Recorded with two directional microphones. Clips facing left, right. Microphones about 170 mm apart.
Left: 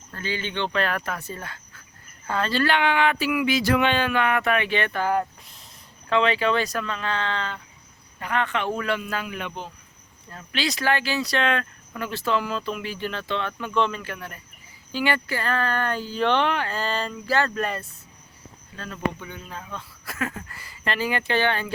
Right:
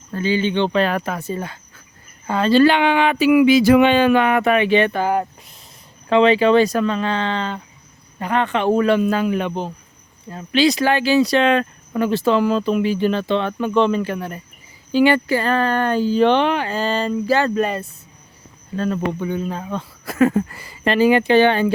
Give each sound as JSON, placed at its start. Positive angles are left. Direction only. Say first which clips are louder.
{"t": 0.1, "sound": "speech", "louder": "right 11 dB", "side_deg": -20}
{"t": 3.6, "sound": "speech", "louder": "right 9 dB", "side_deg": -10}
{"t": 10.2, "sound": "speech", "louder": "right 12 dB", "side_deg": -20}
{"t": 18.8, "sound": "speech", "louder": "right 8 dB", "side_deg": -35}